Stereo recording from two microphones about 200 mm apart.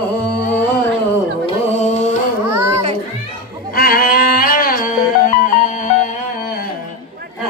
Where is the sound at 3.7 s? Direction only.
45° left (ahead or behind).